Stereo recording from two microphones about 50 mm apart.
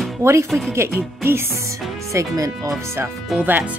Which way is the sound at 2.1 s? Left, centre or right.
Right.